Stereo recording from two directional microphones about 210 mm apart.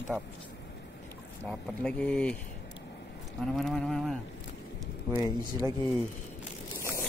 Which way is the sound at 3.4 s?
Centre (ahead or behind).